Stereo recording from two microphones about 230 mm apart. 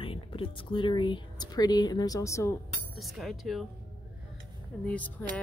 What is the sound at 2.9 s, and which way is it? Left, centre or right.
Speech, centre.